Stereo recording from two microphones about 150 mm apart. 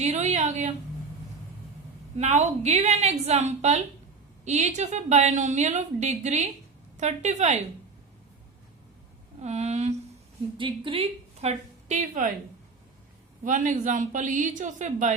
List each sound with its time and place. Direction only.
0.0 s a woman's voice: 50° right (ahead or behind)
2.1 s a woman's voice: 50° right (ahead or behind)
9.4 s a woman's voice: 45° right (ahead or behind)
10.6 s a woman's voice: 35° right (ahead or behind); by 12.3 s 55° right (ahead or behind)
13.4 s speech: 60° right (ahead or behind)